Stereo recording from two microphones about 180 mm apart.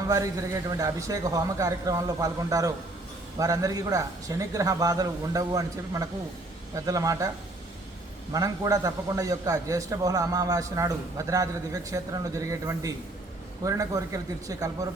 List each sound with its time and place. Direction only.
0.1 s a man's voice: 20° right (ahead or behind)
8.3 s a man's voice: 20° right (ahead or behind)